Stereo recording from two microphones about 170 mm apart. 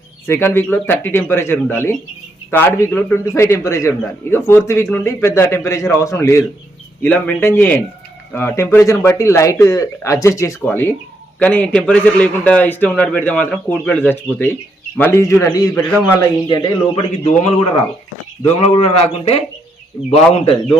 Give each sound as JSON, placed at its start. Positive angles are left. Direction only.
{"t": 0.3, "sound": "a man's voice", "side_deg": 15}
{"t": 16.5, "sound": "a man's voice", "side_deg": 30}